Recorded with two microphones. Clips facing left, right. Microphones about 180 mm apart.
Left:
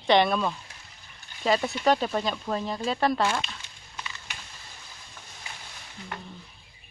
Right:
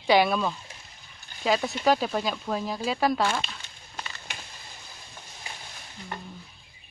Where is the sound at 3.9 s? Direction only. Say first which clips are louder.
Right 1 dB; 45° right (ahead or behind).